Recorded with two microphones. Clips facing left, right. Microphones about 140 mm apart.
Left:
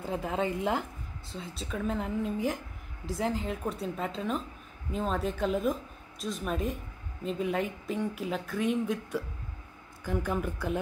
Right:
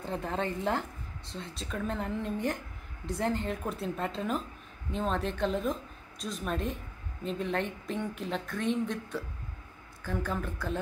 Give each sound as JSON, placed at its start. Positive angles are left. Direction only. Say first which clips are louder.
{"t": 0.0, "sound": "a woman's voice", "louder": "left 2 dB", "side_deg": 5}